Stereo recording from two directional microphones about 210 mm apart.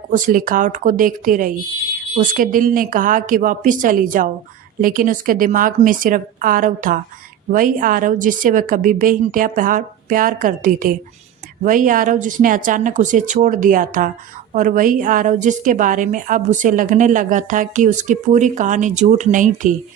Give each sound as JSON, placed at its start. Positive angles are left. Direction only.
{"t": 0.1, "sound": "a woman's voice", "side_deg": -40}